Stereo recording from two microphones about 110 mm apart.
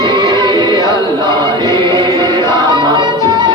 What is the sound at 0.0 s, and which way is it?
Music, 40° right (ahead or behind).